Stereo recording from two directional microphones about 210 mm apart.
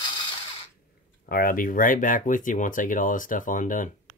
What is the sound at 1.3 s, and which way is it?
Speech, 45° left (ahead or behind).